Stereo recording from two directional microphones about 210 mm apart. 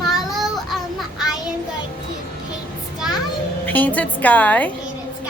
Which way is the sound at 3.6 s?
10° left (ahead or behind).